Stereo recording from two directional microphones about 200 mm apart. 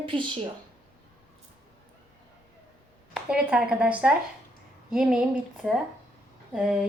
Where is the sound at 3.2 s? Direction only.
5° right (ahead or behind).